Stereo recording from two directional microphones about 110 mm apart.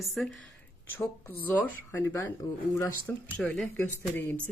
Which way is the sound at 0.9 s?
15° left (ahead or behind).